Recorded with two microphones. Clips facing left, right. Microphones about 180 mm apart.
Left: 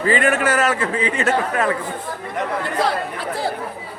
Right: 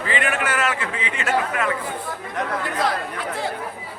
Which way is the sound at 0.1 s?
40° left (ahead or behind).